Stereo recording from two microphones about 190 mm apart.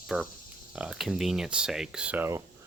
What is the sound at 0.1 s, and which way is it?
A man's voice, centre (ahead or behind).